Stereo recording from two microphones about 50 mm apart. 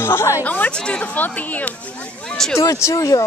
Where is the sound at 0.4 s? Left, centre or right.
Left.